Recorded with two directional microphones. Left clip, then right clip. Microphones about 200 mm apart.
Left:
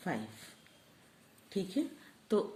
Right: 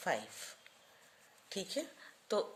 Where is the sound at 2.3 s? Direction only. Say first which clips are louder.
Left 3 dB; 30° right (ahead or behind).